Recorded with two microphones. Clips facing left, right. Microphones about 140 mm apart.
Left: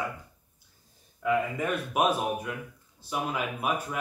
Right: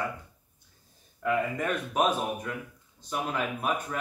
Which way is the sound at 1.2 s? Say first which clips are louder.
Left 1 dB; 5° left (ahead or behind).